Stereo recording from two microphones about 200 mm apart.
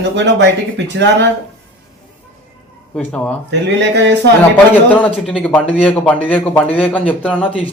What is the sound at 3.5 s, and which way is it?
Speech, 60° right (ahead or behind).